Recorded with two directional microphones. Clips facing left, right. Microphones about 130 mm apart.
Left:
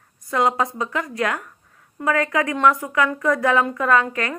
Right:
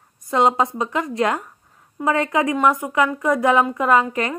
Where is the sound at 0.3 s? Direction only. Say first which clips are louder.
Right 3 dB; 25° right (ahead or behind).